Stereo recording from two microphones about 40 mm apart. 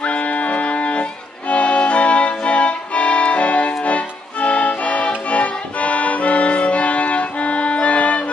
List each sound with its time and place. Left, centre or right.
0.0 s music: left